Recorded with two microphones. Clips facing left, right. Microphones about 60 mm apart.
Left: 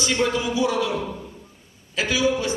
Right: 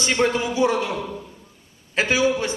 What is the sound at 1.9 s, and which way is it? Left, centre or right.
Speech, right.